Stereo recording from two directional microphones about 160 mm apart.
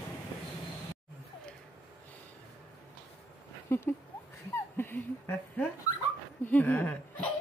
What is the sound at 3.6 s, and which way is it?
Speech, 15° left (ahead or behind).